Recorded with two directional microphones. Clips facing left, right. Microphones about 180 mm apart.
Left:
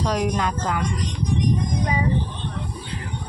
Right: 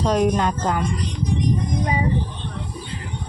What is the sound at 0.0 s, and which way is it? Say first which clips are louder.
Speech: right 4 dB; 25° right (ahead or behind).